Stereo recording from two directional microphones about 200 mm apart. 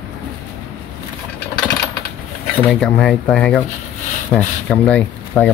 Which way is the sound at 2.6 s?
5° left (ahead or behind).